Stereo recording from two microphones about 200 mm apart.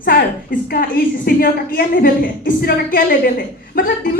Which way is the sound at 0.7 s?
45° left (ahead or behind).